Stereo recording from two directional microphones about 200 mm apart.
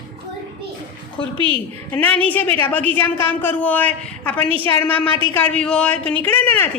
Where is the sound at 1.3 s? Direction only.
25° right (ahead or behind).